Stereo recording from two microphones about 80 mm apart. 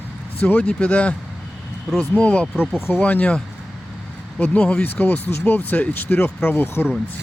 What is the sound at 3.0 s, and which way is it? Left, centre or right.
Speech, centre.